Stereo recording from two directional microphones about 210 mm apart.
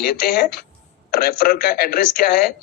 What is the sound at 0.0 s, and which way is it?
Speech, 45° left (ahead or behind).